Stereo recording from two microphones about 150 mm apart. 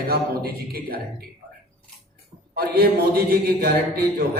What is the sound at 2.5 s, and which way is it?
A man's voice, 90° right.